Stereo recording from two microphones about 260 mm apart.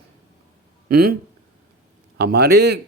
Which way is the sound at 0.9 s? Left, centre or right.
Right.